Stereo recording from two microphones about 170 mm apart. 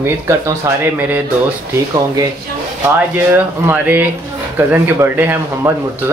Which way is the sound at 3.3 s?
10° right (ahead or behind).